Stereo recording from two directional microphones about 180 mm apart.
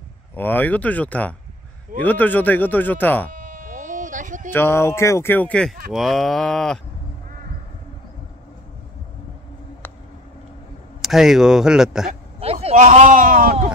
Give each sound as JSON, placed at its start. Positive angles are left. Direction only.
{"t": 0.4, "sound": "speech", "side_deg": 10}
{"t": 3.3, "sound": "bleat", "side_deg": -45}
{"t": 4.5, "sound": "speech", "side_deg": 15}
{"t": 11.0, "sound": "speech", "side_deg": 0}
{"t": 12.6, "sound": "a man's voice", "side_deg": -40}